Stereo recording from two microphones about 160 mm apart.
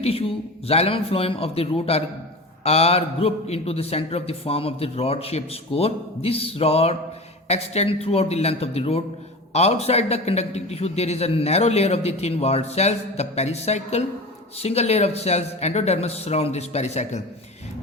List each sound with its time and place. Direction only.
0.0 s a man's voice: 35° left (ahead or behind)